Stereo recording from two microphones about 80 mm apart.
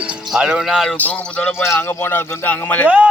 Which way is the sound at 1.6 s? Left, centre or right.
Left.